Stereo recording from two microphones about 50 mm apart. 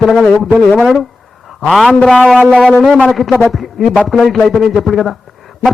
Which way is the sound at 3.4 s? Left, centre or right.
Centre.